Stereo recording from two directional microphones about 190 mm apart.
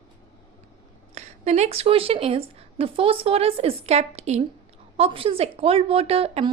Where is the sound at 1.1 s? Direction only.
35° right (ahead or behind).